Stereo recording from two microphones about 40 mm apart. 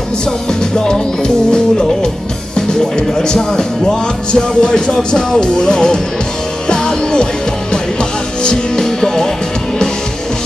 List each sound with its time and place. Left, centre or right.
0.5 s music: centre